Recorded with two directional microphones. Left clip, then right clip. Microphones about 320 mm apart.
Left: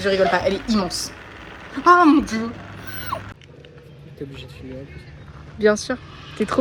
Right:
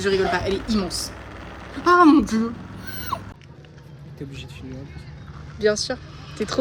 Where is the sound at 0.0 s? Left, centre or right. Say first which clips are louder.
Left 3 dB; centre.